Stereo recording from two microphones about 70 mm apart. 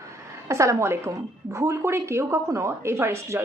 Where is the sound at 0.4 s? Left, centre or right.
Right.